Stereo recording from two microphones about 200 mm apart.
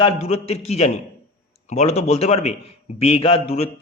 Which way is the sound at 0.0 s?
30° left (ahead or behind).